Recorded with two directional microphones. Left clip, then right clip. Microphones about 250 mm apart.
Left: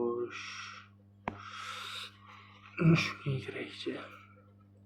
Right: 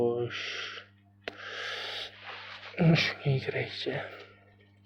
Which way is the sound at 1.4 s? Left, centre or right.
Right.